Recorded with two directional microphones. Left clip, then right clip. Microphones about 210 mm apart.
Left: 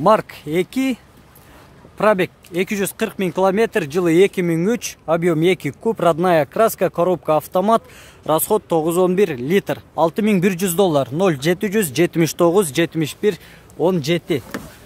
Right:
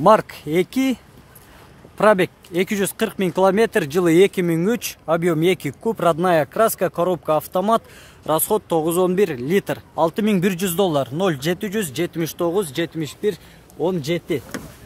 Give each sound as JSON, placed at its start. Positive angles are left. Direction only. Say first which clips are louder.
{"t": 0.0, "sound": "speech", "louder": "right 1 dB", "side_deg": -5}
{"t": 2.0, "sound": "a man's voice", "louder": "right 1 dB", "side_deg": -5}